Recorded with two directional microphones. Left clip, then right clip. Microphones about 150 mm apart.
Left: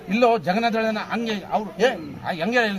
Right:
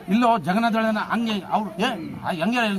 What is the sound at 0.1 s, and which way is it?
A man's voice, 5° left (ahead or behind).